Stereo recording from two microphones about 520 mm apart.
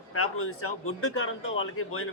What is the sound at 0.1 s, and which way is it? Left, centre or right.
Speech, left.